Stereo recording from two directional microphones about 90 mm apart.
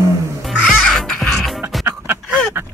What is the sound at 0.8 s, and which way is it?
Music, 5° left (ahead or behind).